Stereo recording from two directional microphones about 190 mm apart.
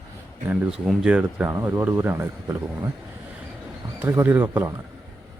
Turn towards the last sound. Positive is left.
turn(degrees=-10)  # may be behind; listen again after turning